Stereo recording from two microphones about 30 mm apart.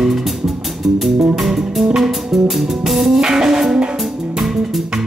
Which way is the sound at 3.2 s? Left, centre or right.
Centre.